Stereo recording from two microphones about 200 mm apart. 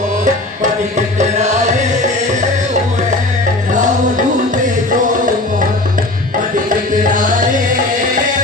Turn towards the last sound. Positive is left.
turn(degrees=-40)  # may be behind; listen again after turning